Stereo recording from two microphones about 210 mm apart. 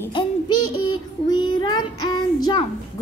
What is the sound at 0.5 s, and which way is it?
Child singing, 90° left.